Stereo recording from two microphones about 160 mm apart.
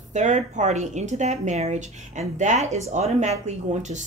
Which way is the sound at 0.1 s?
50° right (ahead or behind).